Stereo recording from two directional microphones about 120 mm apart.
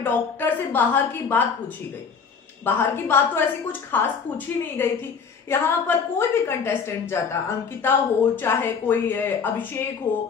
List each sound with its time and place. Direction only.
0.0 s a woman's voice: 15° left (ahead or behind)
2.6 s a woman's voice: 20° left (ahead or behind)